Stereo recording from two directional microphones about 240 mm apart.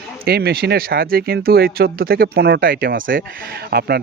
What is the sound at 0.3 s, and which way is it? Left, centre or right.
Speech, right.